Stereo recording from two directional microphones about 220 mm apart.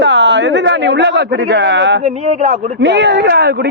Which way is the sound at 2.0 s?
30° right (ahead or behind).